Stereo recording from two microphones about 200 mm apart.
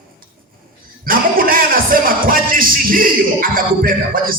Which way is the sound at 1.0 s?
45° right (ahead or behind).